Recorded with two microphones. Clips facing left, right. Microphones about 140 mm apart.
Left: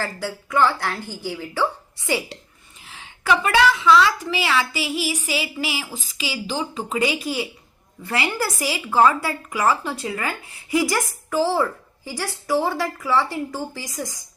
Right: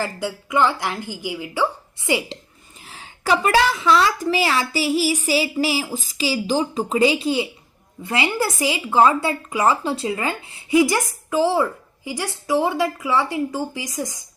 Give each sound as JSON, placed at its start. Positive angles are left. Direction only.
{"t": 0.0, "sound": "a woman's voice", "side_deg": -15}
{"t": 2.8, "sound": "a woman's voice", "side_deg": -35}